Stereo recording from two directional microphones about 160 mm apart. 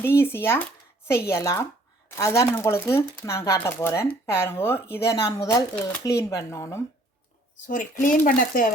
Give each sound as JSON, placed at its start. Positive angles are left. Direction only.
{"t": 0.0, "sound": "speech", "side_deg": 15}
{"t": 7.7, "sound": "speech", "side_deg": 55}